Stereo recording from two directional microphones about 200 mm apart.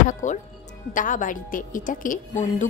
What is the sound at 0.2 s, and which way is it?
Speech, 40° left (ahead or behind).